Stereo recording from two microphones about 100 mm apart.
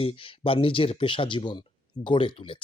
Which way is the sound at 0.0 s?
65° left (ahead or behind).